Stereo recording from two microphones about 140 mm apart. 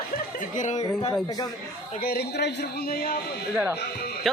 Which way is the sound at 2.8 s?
90° left.